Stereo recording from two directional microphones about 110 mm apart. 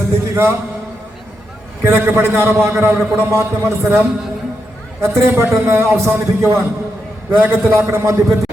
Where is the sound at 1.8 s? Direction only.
20° right (ahead or behind).